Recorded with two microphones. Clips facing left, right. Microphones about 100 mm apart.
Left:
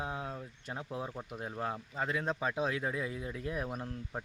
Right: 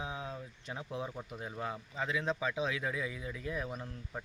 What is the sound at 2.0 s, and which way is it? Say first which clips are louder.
Speech: even; 45° left (ahead or behind).